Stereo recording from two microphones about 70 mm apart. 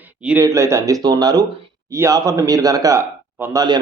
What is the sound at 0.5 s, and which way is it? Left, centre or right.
Speech, right.